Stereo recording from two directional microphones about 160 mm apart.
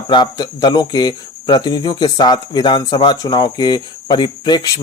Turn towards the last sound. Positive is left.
turn(degrees=25)  # may be behind; listen again after turning